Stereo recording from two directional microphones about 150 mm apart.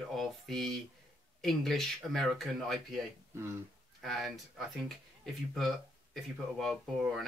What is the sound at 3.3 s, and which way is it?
Speech, 15° right (ahead or behind).